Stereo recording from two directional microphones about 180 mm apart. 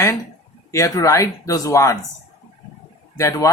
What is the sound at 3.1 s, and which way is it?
Speech, 15° left (ahead or behind).